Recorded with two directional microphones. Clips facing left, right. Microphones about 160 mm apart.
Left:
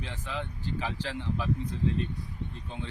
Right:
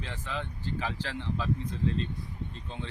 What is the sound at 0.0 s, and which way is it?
Speech, 15° left (ahead or behind).